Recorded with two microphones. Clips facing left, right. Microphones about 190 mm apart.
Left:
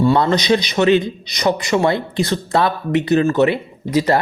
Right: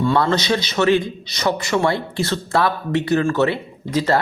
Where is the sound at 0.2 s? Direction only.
15° left (ahead or behind).